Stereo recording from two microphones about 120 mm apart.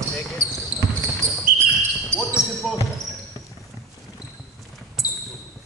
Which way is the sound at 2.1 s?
25° right (ahead or behind).